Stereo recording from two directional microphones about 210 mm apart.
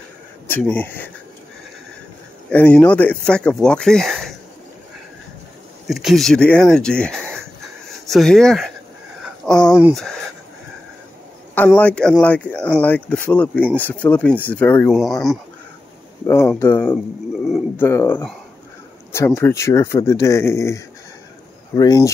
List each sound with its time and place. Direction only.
0.5 s speech: 10° left (ahead or behind)
2.5 s speech: 5° left (ahead or behind)
5.9 s speech: centre (ahead or behind)
9.2 s a sound: 5° left (ahead or behind)
9.8 s speech: centre (ahead or behind)
11.5 s speech: 5° left (ahead or behind)
16.3 s speech: 10° left (ahead or behind)